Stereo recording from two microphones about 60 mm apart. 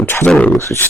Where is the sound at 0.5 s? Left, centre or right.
Left.